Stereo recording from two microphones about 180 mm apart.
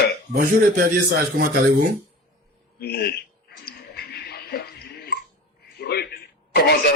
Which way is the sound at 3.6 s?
65° left (ahead or behind).